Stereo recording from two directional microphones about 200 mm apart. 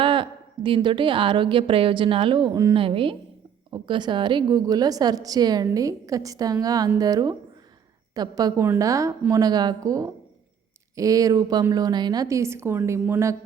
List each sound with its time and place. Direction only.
0.0 s a woman's voice: 25° right (ahead or behind)